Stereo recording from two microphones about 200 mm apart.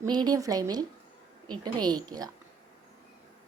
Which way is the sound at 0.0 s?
20° right (ahead or behind).